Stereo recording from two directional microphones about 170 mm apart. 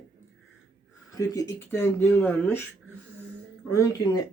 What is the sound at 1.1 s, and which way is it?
Speech, 20° left (ahead or behind).